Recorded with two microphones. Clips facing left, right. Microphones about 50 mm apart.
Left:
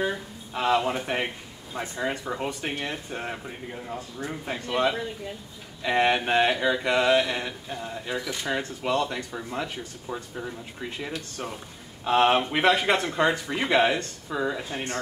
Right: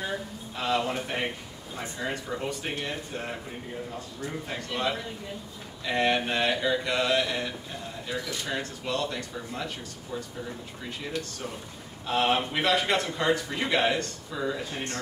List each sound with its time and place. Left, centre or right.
0.6 s speech: left
4.7 s speech: centre
12.1 s speech: left